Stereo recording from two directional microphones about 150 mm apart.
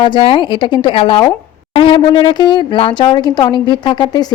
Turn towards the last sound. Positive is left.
turn(degrees=30)  # may be behind; listen again after turning